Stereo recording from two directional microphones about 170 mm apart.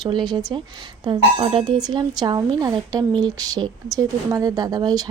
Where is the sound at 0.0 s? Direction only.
25° right (ahead or behind).